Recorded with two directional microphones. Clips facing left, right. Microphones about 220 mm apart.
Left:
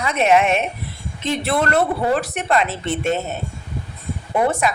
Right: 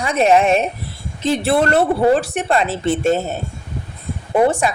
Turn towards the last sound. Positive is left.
turn(degrees=-30)  # may be behind; listen again after turning